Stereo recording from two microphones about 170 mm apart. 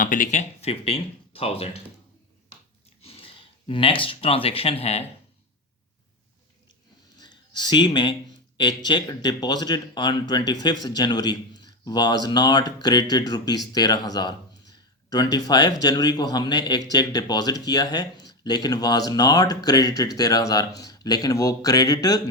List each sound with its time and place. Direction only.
0.0 s speech: 50° left (ahead or behind)
3.0 s speech: 35° left (ahead or behind)
7.2 s a sound: 25° left (ahead or behind)
8.5 s speech: 25° left (ahead or behind)